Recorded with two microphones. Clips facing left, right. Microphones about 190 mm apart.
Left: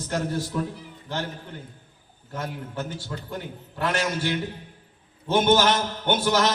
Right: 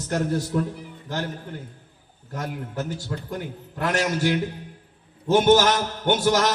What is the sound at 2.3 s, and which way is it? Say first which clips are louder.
Speech: right 1 dB; 40° right (ahead or behind).